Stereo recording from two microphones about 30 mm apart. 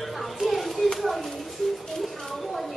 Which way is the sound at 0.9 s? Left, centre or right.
Centre.